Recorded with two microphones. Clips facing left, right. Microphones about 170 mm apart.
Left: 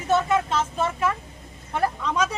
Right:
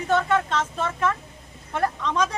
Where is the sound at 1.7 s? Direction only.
10° left (ahead or behind).